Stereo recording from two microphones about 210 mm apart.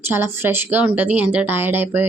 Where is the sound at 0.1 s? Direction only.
10° right (ahead or behind).